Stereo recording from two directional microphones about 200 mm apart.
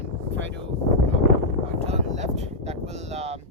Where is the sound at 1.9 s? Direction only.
35° right (ahead or behind).